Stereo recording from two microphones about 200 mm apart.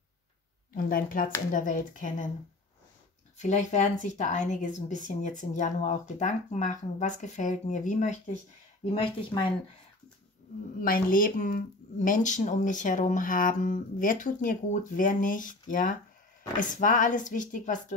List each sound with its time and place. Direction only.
0.7 s speech: 45° left (ahead or behind)
3.3 s speech: 35° left (ahead or behind)
10.8 s speech: 45° left (ahead or behind)